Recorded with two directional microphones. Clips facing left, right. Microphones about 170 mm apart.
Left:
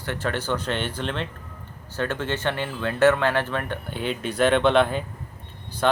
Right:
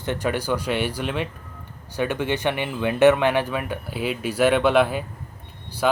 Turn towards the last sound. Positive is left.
turn(degrees=-5)  # may be behind; listen again after turning